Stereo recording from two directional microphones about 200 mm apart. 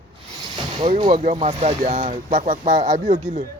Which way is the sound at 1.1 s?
35° right (ahead or behind).